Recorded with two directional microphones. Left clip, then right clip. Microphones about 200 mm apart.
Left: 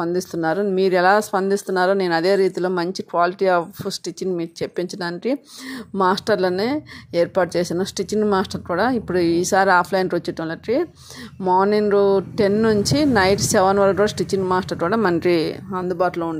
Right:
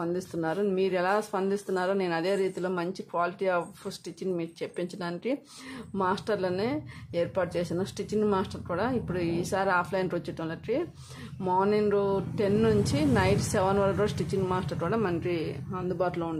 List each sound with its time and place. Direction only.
0.0 s speech: 30° left (ahead or behind)